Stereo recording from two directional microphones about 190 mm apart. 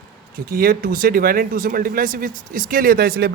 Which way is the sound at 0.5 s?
45° right (ahead or behind).